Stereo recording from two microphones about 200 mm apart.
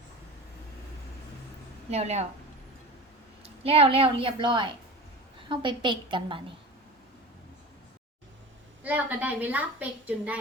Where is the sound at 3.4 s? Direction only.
30° right (ahead or behind).